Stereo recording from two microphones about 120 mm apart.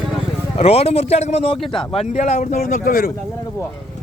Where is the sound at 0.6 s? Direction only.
55° left (ahead or behind).